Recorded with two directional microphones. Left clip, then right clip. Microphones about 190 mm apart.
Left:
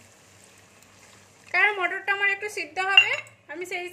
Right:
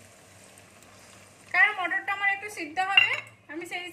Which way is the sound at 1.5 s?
55° left (ahead or behind).